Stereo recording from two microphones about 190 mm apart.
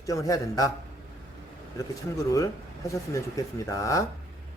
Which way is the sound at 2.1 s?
15° left (ahead or behind).